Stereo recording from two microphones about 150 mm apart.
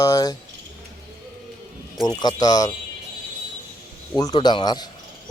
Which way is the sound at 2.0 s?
25° left (ahead or behind).